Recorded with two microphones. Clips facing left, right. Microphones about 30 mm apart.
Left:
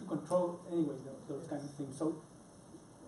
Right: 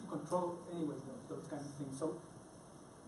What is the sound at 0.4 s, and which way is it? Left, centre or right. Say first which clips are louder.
A man's voice: left 6 dB; centre.